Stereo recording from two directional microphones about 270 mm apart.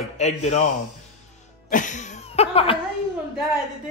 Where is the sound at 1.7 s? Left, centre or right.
Left.